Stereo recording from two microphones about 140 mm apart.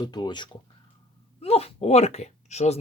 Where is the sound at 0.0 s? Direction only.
30° left (ahead or behind).